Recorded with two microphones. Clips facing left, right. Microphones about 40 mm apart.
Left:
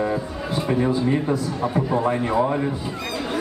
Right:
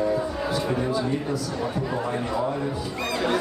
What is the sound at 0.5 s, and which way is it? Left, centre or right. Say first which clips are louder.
A man's voice: left 6 dB; left.